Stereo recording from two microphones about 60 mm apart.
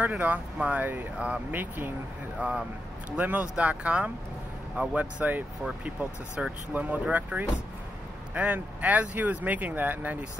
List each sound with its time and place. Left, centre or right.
0.0 s speech: right
3.2 s speech: right